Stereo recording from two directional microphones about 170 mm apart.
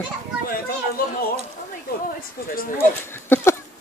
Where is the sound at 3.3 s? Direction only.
10° left (ahead or behind).